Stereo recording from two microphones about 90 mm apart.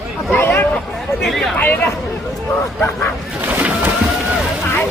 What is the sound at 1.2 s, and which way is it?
Speech, centre (ahead or behind).